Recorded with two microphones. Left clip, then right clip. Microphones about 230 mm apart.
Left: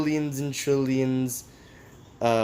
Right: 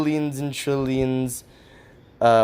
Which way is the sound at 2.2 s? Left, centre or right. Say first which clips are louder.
Right 7 dB; right.